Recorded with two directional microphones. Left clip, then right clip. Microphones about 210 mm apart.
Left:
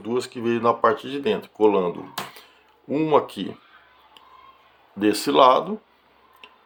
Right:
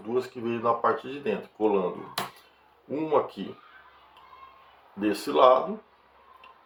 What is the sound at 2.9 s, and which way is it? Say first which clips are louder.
Speech: left 6 dB; 55° left (ahead or behind).